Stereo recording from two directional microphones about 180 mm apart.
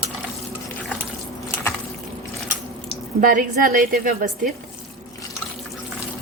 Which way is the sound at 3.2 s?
50° right (ahead or behind).